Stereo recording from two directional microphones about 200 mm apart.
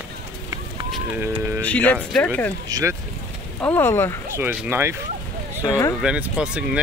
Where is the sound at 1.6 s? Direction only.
5° left (ahead or behind).